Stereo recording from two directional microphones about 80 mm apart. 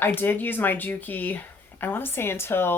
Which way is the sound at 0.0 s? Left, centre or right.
Left.